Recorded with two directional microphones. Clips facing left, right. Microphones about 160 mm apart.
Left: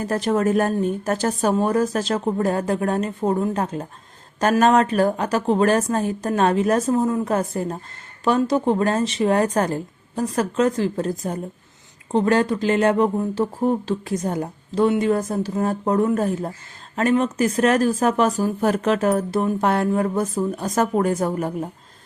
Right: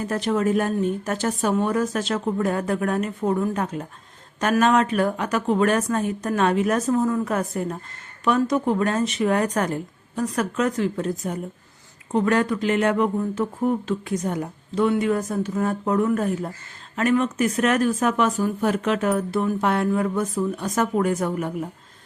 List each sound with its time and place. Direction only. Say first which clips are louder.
0.1 s speech: left 2 dB; 45° left (ahead or behind)